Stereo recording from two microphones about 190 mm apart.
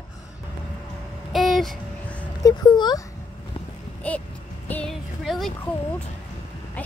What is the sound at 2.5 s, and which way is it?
Speech, 20° left (ahead or behind).